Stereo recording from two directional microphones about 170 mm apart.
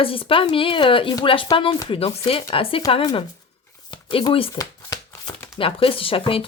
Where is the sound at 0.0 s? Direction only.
30° left (ahead or behind).